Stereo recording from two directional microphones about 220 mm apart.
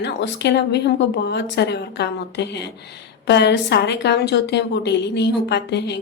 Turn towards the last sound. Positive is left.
turn(degrees=50)  # may be behind; listen again after turning